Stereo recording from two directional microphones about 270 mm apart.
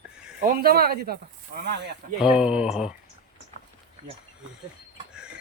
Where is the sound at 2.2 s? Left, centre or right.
Centre.